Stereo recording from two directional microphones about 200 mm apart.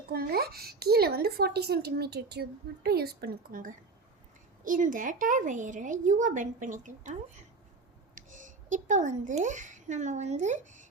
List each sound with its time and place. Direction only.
0.1 s a woman's voice: 50° right (ahead or behind)